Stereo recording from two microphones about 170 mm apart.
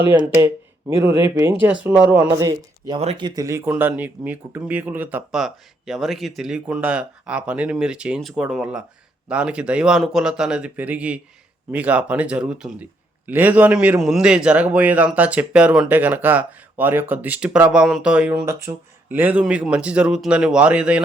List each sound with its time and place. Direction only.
0.1 s a man's voice: 15° right (ahead or behind)
2.1 s a man's voice: 25° right (ahead or behind); by 21.0 s 5° right (ahead or behind)